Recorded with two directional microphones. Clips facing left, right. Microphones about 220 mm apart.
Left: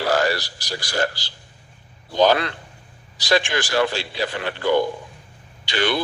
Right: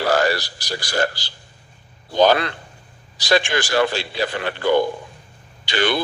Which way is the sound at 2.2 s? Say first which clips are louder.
Right 1 dB; 50° right (ahead or behind).